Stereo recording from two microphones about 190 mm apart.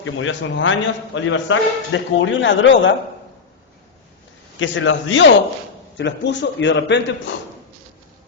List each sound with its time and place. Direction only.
0.0 s a man's voice: 85° left
4.6 s a man's voice: 85° left
6.0 s a man's voice: 70° left (ahead or behind)